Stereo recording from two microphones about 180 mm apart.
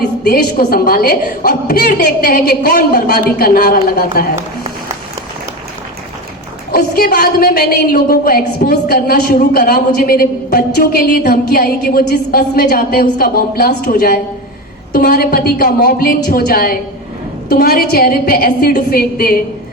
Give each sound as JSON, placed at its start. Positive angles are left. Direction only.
{"t": 0.3, "sound": "a woman's voice", "side_deg": 60}
{"t": 6.7, "sound": "a woman's voice", "side_deg": 55}